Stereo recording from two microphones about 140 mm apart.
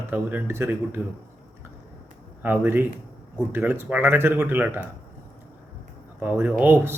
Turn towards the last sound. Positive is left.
turn(degrees=-15)  # may be behind; listen again after turning